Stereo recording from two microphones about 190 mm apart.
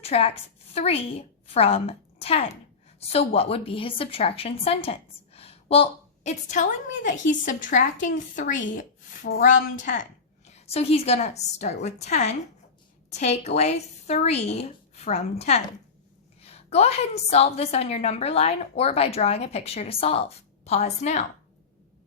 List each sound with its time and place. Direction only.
0.0 s a woman's voice: 30° left (ahead or behind)
9.7 s a woman's voice: 40° left (ahead or behind)